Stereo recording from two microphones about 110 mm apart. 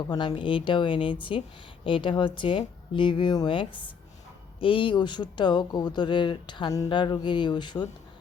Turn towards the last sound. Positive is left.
turn(degrees=40)  # may be behind; listen again after turning